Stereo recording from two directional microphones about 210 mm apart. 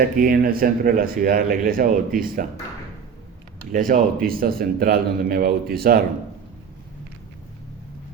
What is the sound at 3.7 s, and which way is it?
A man's voice, 40° right (ahead or behind).